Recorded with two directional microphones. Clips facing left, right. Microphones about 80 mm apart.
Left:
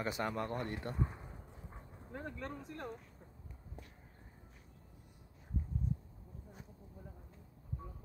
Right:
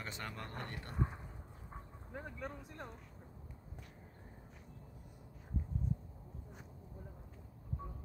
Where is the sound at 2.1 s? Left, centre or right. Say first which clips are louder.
Left 1 dB; centre.